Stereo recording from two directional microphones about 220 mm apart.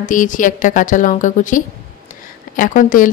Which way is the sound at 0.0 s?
35° left (ahead or behind).